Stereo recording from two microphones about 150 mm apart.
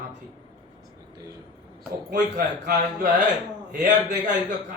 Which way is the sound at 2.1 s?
60° right (ahead or behind).